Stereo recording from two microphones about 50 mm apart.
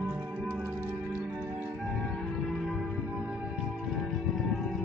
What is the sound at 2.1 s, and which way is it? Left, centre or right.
Music, centre.